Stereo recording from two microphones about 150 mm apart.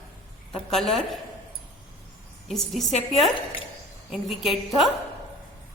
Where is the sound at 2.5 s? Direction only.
Centre (ahead or behind).